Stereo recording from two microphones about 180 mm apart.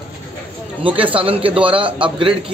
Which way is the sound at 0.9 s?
30° right (ahead or behind).